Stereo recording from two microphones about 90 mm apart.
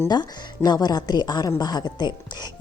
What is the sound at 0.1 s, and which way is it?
Speech, 50° left (ahead or behind).